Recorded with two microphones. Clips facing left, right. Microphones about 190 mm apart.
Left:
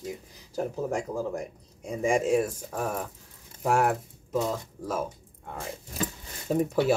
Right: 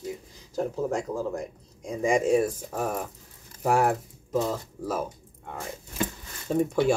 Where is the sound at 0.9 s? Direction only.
10° left (ahead or behind).